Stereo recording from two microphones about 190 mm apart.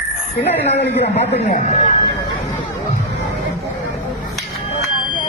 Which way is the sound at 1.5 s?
45° left (ahead or behind).